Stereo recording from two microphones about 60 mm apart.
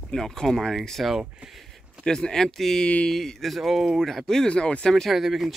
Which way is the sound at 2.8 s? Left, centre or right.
Centre.